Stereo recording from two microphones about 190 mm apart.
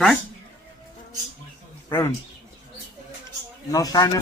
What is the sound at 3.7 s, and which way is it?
Speech, 20° left (ahead or behind).